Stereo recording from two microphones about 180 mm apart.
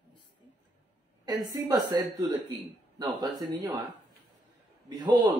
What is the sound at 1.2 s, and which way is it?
Speech, 20° right (ahead or behind).